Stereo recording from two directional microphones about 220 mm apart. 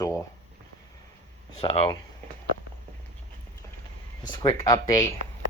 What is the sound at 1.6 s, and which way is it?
Speech, 25° left (ahead or behind).